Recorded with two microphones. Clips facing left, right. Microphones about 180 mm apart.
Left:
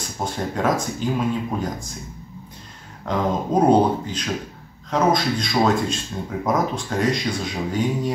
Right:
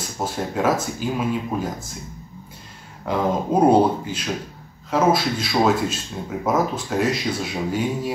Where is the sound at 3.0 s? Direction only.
10° right (ahead or behind).